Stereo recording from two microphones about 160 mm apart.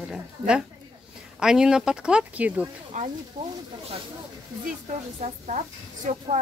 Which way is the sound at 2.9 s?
50° right (ahead or behind).